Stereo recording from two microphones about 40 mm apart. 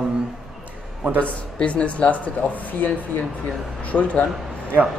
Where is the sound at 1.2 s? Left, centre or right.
Left.